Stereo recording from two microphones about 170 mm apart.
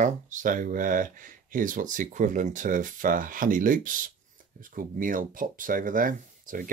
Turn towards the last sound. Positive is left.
turn(degrees=-55)  # may be behind; listen again after turning